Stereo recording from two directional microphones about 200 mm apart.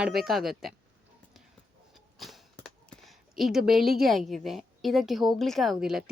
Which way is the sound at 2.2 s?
Centre (ahead or behind).